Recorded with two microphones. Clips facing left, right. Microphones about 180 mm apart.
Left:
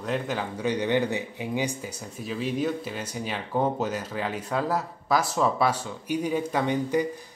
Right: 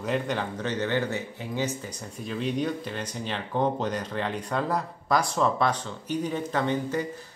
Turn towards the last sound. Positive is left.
turn(degrees=15)  # may be behind; listen again after turning